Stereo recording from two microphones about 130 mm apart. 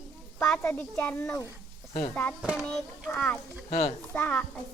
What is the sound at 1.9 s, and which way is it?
Speech, 50° left (ahead or behind).